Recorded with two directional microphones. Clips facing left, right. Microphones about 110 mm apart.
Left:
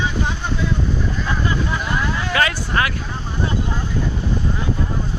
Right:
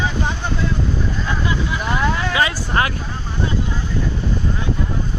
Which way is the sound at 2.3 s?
25° right (ahead or behind).